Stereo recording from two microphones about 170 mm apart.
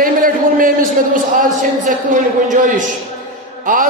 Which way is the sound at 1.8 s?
50° right (ahead or behind).